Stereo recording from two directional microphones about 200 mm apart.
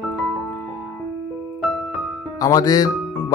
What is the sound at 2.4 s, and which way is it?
Speech, 15° left (ahead or behind).